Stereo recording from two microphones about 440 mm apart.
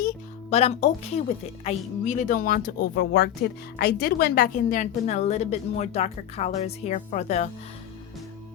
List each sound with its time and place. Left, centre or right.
0.5 s speech: centre